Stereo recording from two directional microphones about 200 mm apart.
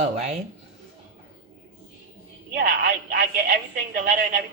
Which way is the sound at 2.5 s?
40° right (ahead or behind).